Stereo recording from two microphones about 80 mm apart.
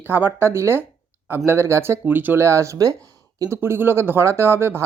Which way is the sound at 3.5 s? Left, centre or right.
Right.